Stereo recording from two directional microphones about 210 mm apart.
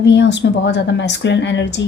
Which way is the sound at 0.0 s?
55° left (ahead or behind).